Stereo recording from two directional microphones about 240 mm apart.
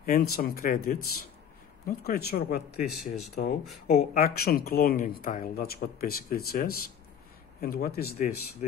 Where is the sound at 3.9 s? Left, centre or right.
Left.